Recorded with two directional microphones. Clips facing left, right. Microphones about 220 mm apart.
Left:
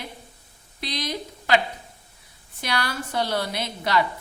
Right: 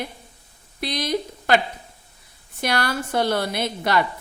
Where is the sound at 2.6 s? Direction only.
50° right (ahead or behind).